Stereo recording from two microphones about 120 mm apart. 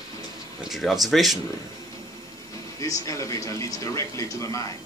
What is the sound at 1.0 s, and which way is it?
Speech, centre (ahead or behind).